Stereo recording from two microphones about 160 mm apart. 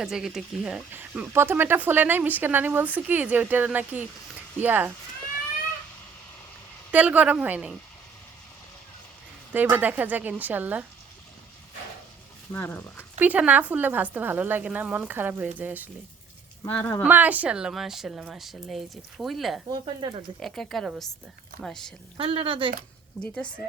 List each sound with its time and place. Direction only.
0.0 s speech: 5° right (ahead or behind)
6.9 s speech: 10° right (ahead or behind)
9.5 s speech: 10° right (ahead or behind)
12.5 s speech: 15° left (ahead or behind)
13.1 s speech: 10° right (ahead or behind)
16.6 s speech: 10° left (ahead or behind)
17.1 s a woman's voice: 10° right (ahead or behind)
19.7 s speech: 30° right (ahead or behind)
20.4 s a woman's voice: centre (ahead or behind)
22.2 s speech: 35° right (ahead or behind)
23.2 s speech: 5° left (ahead or behind)